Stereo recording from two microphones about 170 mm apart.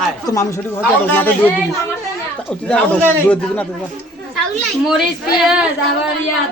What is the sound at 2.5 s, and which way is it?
A man's voice, 10° left (ahead or behind).